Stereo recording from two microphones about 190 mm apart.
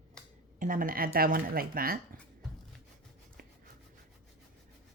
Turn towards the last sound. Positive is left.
turn(degrees=-50)  # may be behind; listen again after turning